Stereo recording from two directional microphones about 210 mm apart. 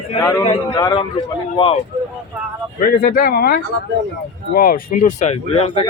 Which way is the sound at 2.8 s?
40° left (ahead or behind).